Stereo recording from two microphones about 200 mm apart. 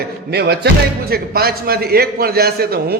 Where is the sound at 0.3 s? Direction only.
55° right (ahead or behind).